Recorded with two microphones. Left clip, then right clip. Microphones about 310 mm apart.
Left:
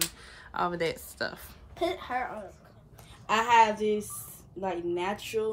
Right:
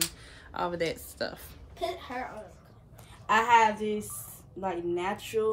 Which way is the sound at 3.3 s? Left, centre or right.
Centre.